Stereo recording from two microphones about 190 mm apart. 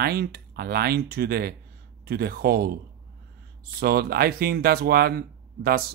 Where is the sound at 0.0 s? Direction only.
55° right (ahead or behind).